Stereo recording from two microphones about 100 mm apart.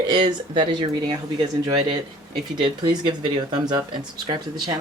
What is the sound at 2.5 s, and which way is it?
Speech, 55° right (ahead or behind).